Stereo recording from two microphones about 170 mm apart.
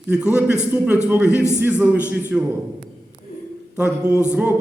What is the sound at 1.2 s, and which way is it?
Speech, 15° left (ahead or behind).